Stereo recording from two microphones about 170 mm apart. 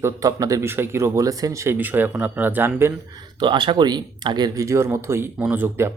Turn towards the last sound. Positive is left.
turn(degrees=-15)  # may be behind; listen again after turning